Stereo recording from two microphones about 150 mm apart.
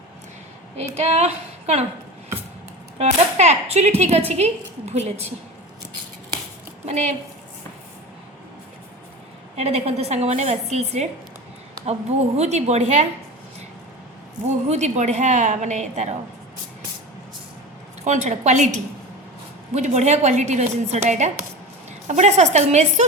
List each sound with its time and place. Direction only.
0.9 s a woman's voice: 45° right (ahead or behind)
3.0 s a woman's voice: 50° right (ahead or behind)
6.8 s a woman's voice: 50° right (ahead or behind)
9.6 s a woman's voice: 45° right (ahead or behind)
12.4 s a woman's voice: 50° right (ahead or behind)
14.4 s a woman's voice: 50° right (ahead or behind)
18.0 s a woman's voice: 50° right (ahead or behind)